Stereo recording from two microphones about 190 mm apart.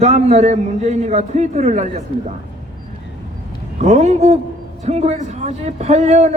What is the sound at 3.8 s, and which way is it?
A man's voice, 35° right (ahead or behind).